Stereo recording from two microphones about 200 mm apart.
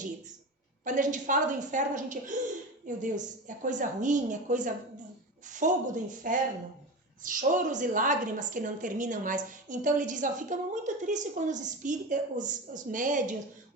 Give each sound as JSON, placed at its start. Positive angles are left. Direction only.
{"t": 0.9, "sound": "a woman's voice", "side_deg": -40}